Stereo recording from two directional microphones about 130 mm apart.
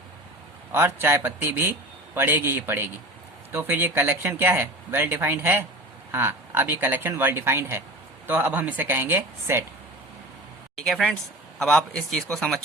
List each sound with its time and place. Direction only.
0.7 s speech: 20° right (ahead or behind)
10.8 s speech: 5° left (ahead or behind)